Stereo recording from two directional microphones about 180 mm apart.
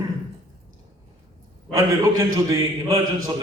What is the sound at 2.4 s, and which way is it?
Speech, 20° right (ahead or behind).